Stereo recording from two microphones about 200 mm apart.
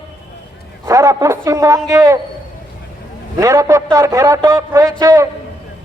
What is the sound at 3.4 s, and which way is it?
A man's voice, 15° right (ahead or behind).